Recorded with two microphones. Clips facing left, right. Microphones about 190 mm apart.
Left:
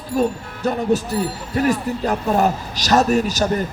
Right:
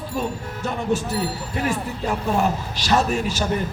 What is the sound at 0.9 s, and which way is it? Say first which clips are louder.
Music: left 3 dB; 40° left (ahead or behind).